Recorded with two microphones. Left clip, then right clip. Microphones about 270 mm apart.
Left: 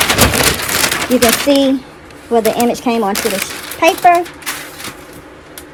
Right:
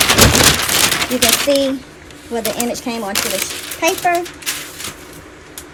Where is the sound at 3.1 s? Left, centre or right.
Centre.